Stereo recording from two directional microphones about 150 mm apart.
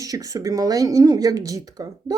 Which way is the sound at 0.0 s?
25° right (ahead or behind).